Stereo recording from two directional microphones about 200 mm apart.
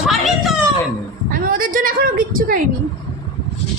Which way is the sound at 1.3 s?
45° right (ahead or behind).